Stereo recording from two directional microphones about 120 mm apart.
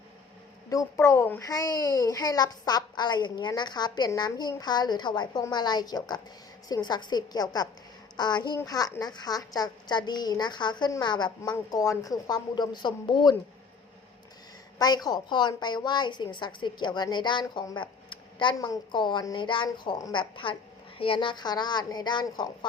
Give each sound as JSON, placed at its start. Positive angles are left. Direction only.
{"t": 0.7, "sound": "a child's voice", "side_deg": 25}
{"t": 11.5, "sound": "a child's voice", "side_deg": 25}
{"t": 14.8, "sound": "a child's voice", "side_deg": 35}
{"t": 17.7, "sound": "a sound", "side_deg": 40}
{"t": 18.7, "sound": "a child's voice", "side_deg": 40}